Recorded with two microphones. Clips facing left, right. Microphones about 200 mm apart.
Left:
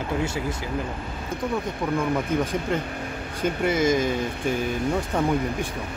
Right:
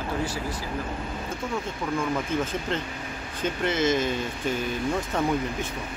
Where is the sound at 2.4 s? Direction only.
15° left (ahead or behind).